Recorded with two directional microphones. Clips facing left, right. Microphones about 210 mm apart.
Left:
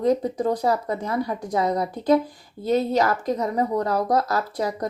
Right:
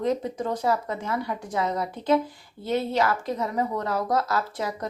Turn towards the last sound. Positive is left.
turn(degrees=35)  # may be behind; listen again after turning